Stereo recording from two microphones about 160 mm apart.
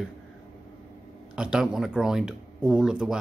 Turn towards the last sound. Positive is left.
turn(degrees=-5)  # may be behind; listen again after turning